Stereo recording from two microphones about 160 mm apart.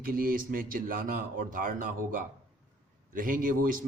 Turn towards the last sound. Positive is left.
turn(degrees=-60)  # may be behind; listen again after turning